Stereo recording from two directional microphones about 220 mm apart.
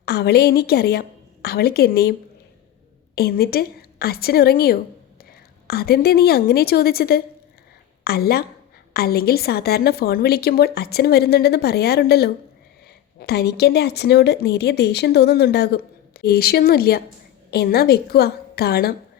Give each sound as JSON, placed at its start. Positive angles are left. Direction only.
{"t": 0.0, "sound": "a woman's voice", "side_deg": 45}
{"t": 3.2, "sound": "speech", "side_deg": 45}